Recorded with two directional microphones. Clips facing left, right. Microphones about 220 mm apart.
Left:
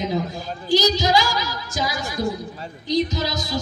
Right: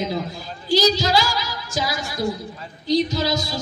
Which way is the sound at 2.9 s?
20° left (ahead or behind).